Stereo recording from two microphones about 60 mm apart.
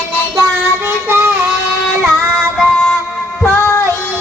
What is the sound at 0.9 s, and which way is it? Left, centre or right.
Child singing, right.